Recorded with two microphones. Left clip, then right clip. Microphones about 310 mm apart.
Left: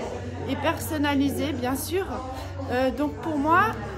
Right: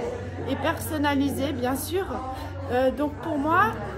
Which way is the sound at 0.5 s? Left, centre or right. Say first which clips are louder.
Even; centre.